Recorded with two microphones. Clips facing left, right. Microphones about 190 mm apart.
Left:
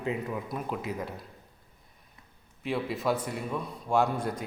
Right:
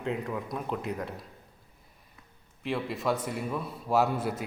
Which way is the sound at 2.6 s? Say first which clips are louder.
Left 1 dB; centre (ahead or behind).